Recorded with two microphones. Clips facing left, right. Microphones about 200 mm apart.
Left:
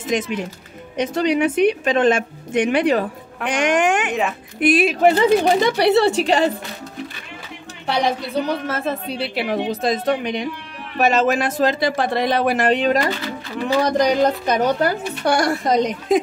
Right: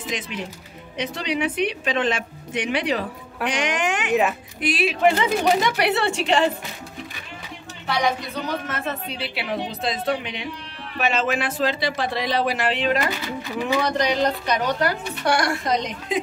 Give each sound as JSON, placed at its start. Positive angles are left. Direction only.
{"t": 0.1, "sound": "a woman's voice", "side_deg": 50}
{"t": 4.1, "sound": "a woman's voice", "side_deg": 0}
{"t": 4.6, "sound": "a woman's voice", "side_deg": 50}
{"t": 8.6, "sound": "a woman's voice", "side_deg": 35}